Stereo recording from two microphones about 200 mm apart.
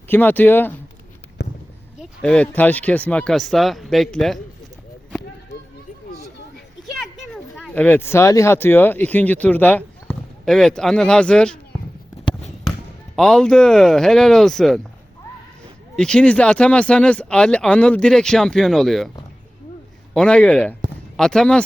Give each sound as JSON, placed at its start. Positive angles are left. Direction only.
{"t": 0.1, "sound": "speech", "side_deg": 10}
{"t": 1.4, "sound": "a sound", "side_deg": 60}
{"t": 2.0, "sound": "speech", "side_deg": 5}
{"t": 7.0, "sound": "speech", "side_deg": 0}
{"t": 12.2, "sound": "basketball bounce", "side_deg": 30}
{"t": 13.1, "sound": "speech", "side_deg": 5}
{"t": 16.0, "sound": "speech", "side_deg": 5}
{"t": 20.1, "sound": "speech", "side_deg": 5}